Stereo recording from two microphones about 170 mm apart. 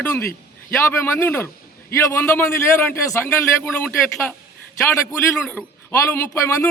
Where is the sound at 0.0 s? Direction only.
10° left (ahead or behind).